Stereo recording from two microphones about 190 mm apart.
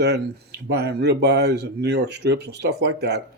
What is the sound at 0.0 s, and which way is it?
Speech, 60° right (ahead or behind).